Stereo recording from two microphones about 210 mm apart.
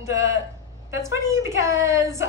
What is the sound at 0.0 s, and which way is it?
Speech, 15° right (ahead or behind).